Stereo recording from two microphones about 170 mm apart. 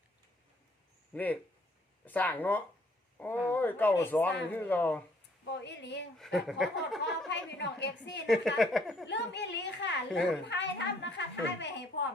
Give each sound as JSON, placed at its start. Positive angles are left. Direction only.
{"t": 1.1, "sound": "speech", "side_deg": 10}
{"t": 5.5, "sound": "a woman's voice", "side_deg": 90}
{"t": 6.1, "sound": "speech", "side_deg": 0}
{"t": 7.3, "sound": "a woman's voice", "side_deg": 90}
{"t": 8.3, "sound": "speech", "side_deg": 0}
{"t": 9.0, "sound": "a woman's voice", "side_deg": 90}